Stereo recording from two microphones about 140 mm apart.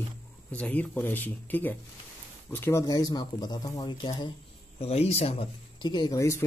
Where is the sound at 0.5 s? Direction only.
10° left (ahead or behind); by 4.2 s 30° left (ahead or behind).